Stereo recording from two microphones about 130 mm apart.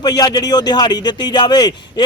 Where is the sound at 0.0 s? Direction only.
30° left (ahead or behind).